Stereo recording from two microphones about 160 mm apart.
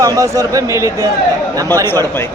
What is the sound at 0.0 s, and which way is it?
Speech, 20° right (ahead or behind).